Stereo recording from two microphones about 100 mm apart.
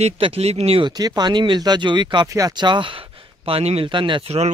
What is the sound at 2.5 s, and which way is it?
Speech, 50° right (ahead or behind).